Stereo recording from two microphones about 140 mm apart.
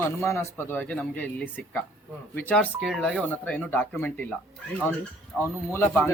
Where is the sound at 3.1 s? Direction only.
10° left (ahead or behind).